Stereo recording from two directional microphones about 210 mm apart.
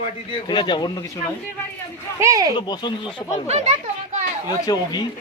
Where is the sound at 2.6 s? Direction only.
20° left (ahead or behind).